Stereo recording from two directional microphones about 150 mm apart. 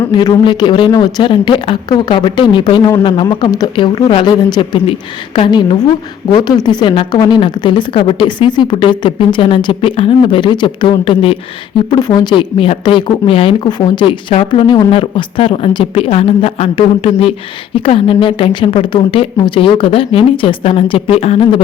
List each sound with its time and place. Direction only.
0.1 s a woman's voice: 30° left (ahead or behind)